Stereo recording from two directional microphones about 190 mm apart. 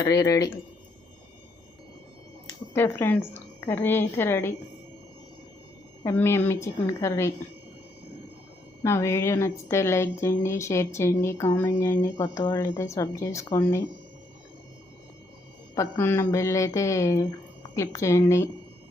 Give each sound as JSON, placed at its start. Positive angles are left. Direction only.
{"t": 0.0, "sound": "a woman's voice", "side_deg": 20}
{"t": 2.7, "sound": "a woman's voice", "side_deg": 10}
{"t": 6.0, "sound": "a woman's voice", "side_deg": 15}
{"t": 8.8, "sound": "a woman's voice", "side_deg": 15}
{"t": 15.7, "sound": "a woman's voice", "side_deg": 15}